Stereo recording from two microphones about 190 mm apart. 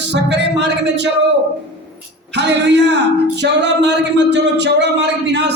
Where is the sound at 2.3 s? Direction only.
65° right (ahead or behind).